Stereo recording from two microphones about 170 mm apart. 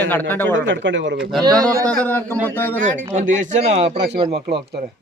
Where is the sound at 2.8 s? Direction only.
45° right (ahead or behind).